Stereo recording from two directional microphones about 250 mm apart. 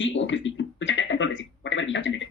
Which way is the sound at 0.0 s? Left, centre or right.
Left.